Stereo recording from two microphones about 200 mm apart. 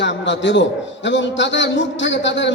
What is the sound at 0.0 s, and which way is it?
A man's voice, 65° left (ahead or behind).